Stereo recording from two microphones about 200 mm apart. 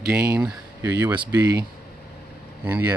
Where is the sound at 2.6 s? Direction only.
10° right (ahead or behind).